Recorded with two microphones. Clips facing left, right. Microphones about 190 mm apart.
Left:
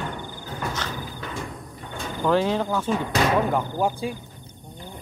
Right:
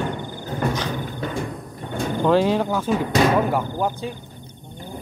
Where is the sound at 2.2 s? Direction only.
15° right (ahead or behind).